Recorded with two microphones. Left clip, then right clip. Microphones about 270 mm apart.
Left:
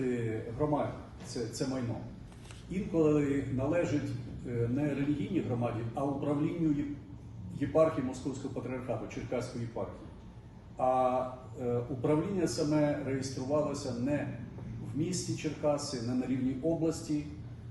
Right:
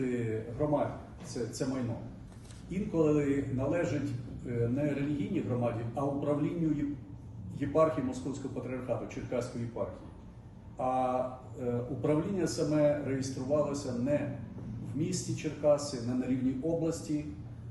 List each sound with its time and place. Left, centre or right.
0.0 s a man's voice: centre
10.8 s a man's voice: centre